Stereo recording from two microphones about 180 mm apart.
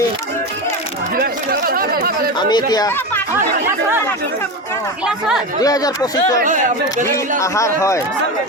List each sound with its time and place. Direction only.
1.1 s chatter: 55° right (ahead or behind)
2.4 s speech: 25° left (ahead or behind)
5.6 s a man's voice: 20° left (ahead or behind)